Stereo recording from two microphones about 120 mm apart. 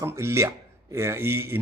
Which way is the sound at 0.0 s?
20° right (ahead or behind).